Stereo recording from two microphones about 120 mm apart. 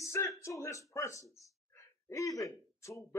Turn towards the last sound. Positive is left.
turn(degrees=25)  # may be behind; listen again after turning